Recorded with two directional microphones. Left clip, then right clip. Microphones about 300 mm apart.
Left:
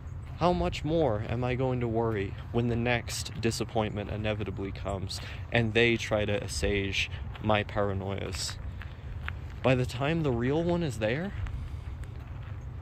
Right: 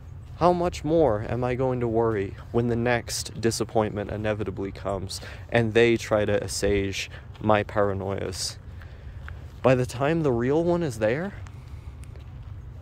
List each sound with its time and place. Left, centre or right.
0.4 s speech: centre
9.6 s speech: centre